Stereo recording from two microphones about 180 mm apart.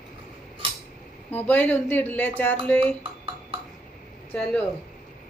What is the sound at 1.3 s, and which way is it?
Speech, 10° left (ahead or behind).